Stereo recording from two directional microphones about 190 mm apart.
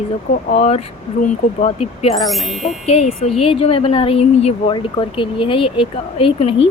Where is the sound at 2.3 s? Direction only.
Centre (ahead or behind).